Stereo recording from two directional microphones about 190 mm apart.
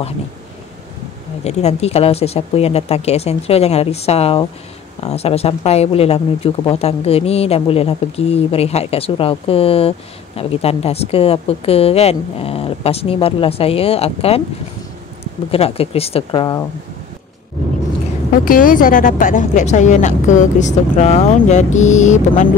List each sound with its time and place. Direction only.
1.4 s speech: 35° left (ahead or behind)
15.5 s speech: 30° left (ahead or behind)
18.4 s speech: 45° left (ahead or behind)